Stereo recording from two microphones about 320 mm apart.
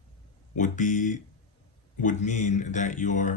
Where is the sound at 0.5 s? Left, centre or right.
Left.